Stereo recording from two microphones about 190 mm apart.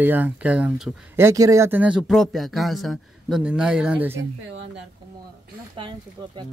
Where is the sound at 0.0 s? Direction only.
10° right (ahead or behind).